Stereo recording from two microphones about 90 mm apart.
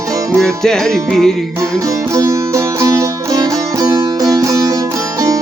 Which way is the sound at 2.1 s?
35° right (ahead or behind).